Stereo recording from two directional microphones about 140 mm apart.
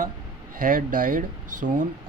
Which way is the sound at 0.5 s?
75° right (ahead or behind).